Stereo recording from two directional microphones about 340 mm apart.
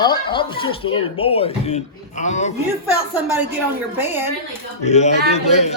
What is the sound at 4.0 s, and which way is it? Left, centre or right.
Speech, centre.